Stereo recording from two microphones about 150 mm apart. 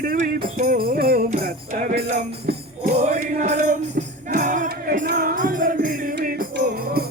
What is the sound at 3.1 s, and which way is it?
Music, 60° right (ahead or behind).